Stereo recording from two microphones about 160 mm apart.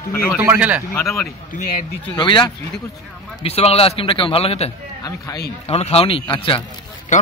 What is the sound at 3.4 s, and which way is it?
A man's voice, 40° left (ahead or behind).